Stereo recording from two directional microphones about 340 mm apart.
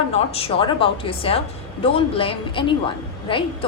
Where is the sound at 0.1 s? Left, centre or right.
Centre.